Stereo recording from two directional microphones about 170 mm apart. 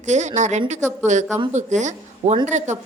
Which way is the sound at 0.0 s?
45° right (ahead or behind).